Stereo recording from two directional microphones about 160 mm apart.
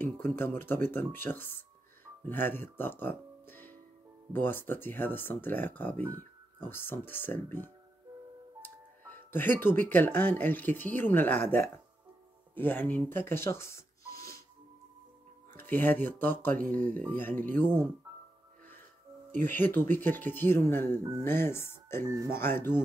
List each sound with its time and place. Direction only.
0.0 s speech: 15° left (ahead or behind)
15.5 s speech: 10° left (ahead or behind)
19.4 s speech: 10° left (ahead or behind)
22.0 s speech: 20° right (ahead or behind)
22.3 s speech: 15° left (ahead or behind)